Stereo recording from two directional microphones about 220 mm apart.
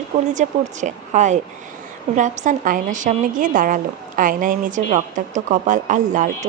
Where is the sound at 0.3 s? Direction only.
35° right (ahead or behind).